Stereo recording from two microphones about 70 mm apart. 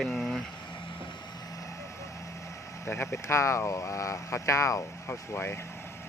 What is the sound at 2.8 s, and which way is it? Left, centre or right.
Speech, left.